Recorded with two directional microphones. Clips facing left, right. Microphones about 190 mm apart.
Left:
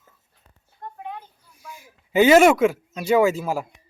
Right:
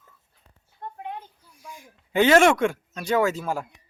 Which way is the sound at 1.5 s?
5° left (ahead or behind).